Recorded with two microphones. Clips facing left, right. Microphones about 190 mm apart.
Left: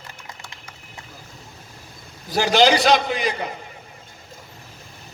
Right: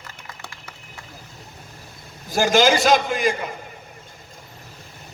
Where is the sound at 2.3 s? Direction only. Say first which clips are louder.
Even; 45° right (ahead or behind).